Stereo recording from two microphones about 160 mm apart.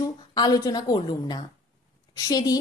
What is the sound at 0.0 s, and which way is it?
A woman's voice, 25° left (ahead or behind).